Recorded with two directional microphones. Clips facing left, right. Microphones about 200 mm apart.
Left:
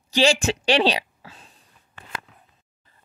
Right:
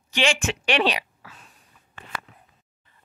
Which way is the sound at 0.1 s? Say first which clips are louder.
Left 5 dB; 35° left (ahead or behind).